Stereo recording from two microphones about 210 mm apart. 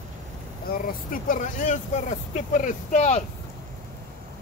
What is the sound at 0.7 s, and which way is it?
Speech, 40° left (ahead or behind).